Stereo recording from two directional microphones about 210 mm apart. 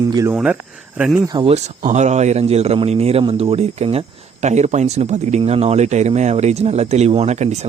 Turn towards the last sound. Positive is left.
turn(degrees=-30)  # may be behind; listen again after turning